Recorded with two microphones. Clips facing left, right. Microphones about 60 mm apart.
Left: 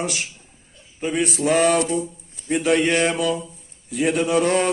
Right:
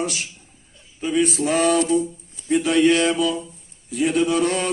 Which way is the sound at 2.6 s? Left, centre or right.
Left.